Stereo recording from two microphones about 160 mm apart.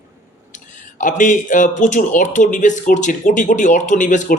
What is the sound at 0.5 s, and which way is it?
Speech, 50° left (ahead or behind).